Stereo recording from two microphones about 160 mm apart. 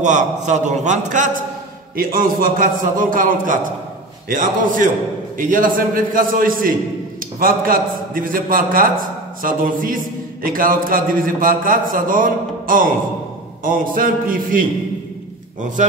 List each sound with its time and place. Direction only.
0.0 s a man's voice: 50° right (ahead or behind)
2.0 s a man's voice: 65° right (ahead or behind)